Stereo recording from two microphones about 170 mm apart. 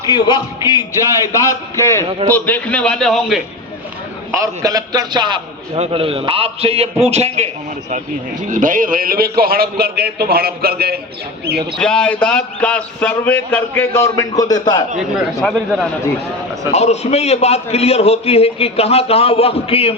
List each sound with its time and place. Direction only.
0.1 s a man's voice: 25° left (ahead or behind); by 3.4 s centre (ahead or behind)
4.3 s a man's voice: 20° right (ahead or behind); by 11.0 s 65° right (ahead or behind)
11.8 s a man's voice: 5° left (ahead or behind); by 14.8 s 25° left (ahead or behind)
14.9 s a man's voice: centre (ahead or behind)
16.7 s a man's voice: 40° left (ahead or behind)